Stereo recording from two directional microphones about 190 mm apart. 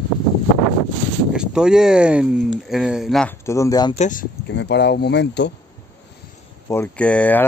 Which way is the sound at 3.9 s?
40° left (ahead or behind).